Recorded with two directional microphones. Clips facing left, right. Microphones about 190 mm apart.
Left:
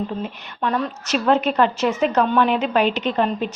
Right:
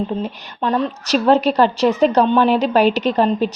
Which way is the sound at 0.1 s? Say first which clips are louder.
Right 4 dB; 30° right (ahead or behind).